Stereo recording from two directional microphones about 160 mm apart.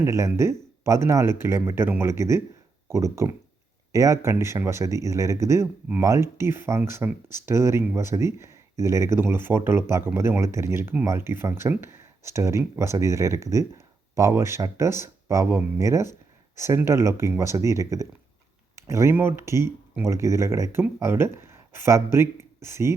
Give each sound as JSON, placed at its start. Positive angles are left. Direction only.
{"t": 0.0, "sound": "speech", "side_deg": -20}